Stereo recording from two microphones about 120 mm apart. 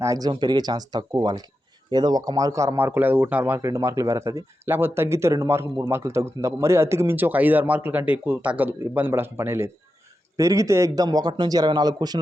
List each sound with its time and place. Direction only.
0.0 s a man's voice: 30° right (ahead or behind)